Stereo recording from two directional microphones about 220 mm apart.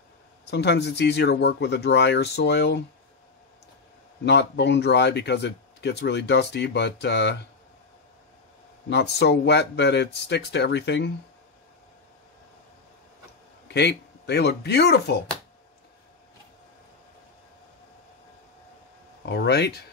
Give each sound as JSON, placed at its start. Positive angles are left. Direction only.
{"t": 0.5, "sound": "speech", "side_deg": 50}
{"t": 4.2, "sound": "speech", "side_deg": 50}
{"t": 8.8, "sound": "speech", "side_deg": 50}
{"t": 13.7, "sound": "speech", "side_deg": 50}
{"t": 19.2, "sound": "speech", "side_deg": 50}